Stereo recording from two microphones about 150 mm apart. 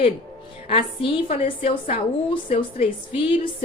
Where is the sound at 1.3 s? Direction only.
65° left (ahead or behind).